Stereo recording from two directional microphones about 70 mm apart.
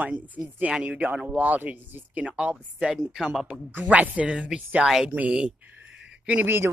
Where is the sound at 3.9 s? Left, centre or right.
Centre.